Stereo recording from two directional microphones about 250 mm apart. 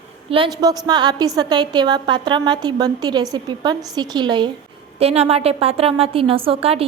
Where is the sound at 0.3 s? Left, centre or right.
Right.